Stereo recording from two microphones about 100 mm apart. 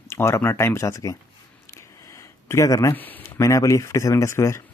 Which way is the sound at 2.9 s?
20° left (ahead or behind).